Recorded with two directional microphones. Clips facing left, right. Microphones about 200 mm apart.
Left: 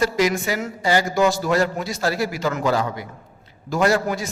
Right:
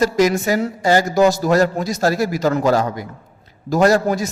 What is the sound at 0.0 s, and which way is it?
A man's voice, 45° right (ahead or behind).